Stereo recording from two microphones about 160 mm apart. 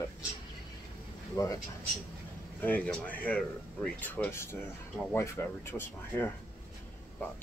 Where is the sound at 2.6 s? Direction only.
10° left (ahead or behind).